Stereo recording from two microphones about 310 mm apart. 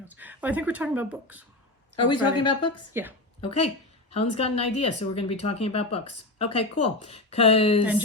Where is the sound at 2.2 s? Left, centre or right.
Left.